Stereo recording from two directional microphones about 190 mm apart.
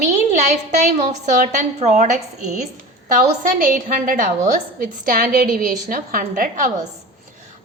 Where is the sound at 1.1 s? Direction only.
40° right (ahead or behind).